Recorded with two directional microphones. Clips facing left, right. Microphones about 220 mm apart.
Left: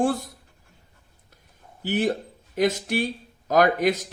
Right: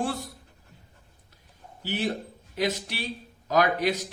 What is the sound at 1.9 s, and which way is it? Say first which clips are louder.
A man's voice: left 5 dB; 50° left (ahead or behind).